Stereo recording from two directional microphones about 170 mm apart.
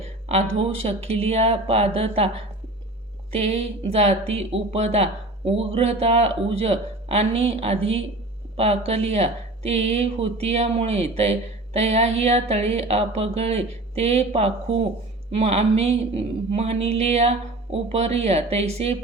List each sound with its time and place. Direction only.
0.3 s speech: 40° right (ahead or behind)
3.3 s speech: 40° right (ahead or behind)